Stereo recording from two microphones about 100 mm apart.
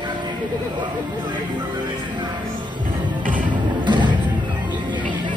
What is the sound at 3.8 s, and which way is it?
Music, 50° right (ahead or behind).